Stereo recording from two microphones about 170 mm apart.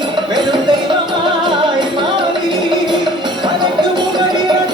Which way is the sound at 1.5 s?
25° right (ahead or behind).